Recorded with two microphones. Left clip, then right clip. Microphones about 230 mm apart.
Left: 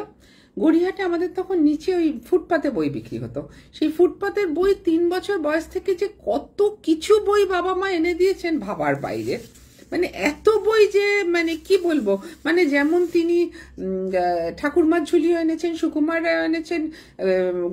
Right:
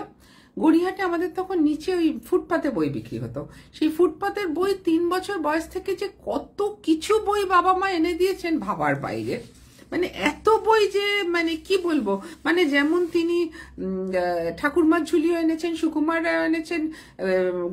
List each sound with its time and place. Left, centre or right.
0.6 s speech: centre
11.6 s speech: right
12.0 s speech: centre